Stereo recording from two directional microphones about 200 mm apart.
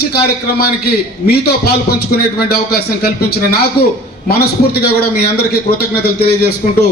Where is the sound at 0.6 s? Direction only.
50° left (ahead or behind).